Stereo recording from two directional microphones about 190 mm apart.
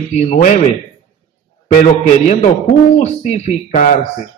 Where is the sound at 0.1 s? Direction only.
35° left (ahead or behind).